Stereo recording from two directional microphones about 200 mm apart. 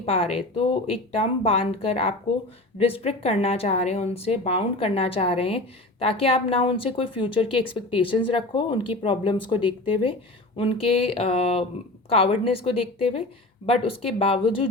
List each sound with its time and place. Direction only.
0.0 s a woman's voice: 30° left (ahead or behind)